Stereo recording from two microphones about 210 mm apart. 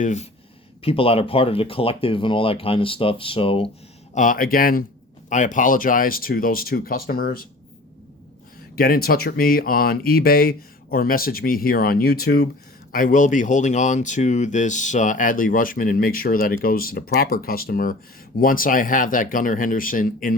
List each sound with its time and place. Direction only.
0.0 s speech: 35° left (ahead or behind)
4.1 s speech: 40° left (ahead or behind)
8.7 s speech: 45° left (ahead or behind)